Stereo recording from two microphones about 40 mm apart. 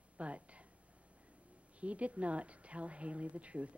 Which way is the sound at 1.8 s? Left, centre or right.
Right.